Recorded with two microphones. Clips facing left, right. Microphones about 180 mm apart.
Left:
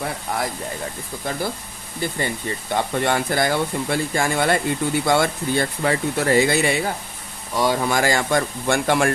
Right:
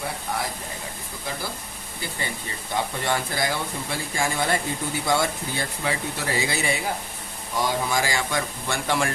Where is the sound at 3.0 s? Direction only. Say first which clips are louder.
Left 6 dB; 55° left (ahead or behind).